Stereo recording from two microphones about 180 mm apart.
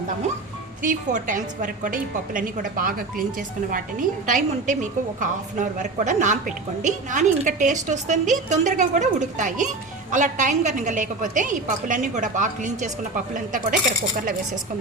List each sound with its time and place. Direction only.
0.8 s a woman's voice: 45° right (ahead or behind)